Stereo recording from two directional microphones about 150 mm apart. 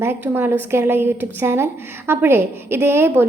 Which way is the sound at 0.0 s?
15° right (ahead or behind).